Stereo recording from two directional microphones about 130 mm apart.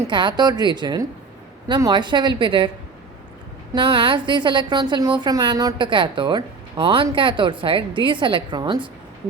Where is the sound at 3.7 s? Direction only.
40° right (ahead or behind).